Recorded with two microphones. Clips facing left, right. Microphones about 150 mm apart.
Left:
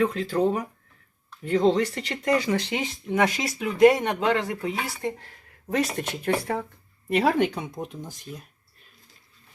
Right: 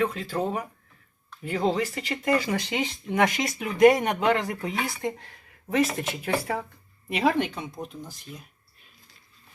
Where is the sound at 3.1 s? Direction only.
15° right (ahead or behind).